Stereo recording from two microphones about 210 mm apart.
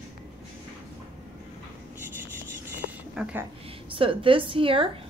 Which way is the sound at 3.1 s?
5° right (ahead or behind).